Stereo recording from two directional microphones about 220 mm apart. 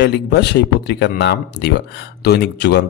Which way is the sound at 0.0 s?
50° left (ahead or behind).